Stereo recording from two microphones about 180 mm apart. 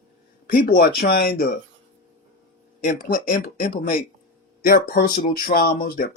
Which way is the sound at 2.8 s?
50° left (ahead or behind).